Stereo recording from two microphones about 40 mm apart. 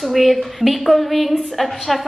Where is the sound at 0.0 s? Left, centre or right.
Centre.